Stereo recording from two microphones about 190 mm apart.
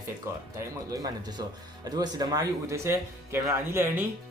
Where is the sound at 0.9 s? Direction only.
20° right (ahead or behind).